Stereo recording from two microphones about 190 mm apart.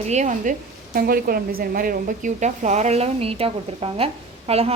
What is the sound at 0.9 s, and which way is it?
A woman's voice, 50° right (ahead or behind).